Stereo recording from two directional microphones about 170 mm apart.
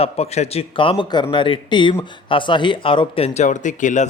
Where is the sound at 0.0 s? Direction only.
40° left (ahead or behind).